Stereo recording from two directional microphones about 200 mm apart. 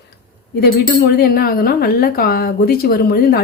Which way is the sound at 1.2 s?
50° left (ahead or behind).